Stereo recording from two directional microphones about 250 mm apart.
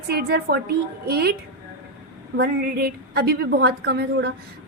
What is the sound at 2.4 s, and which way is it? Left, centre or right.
A woman's voice, right.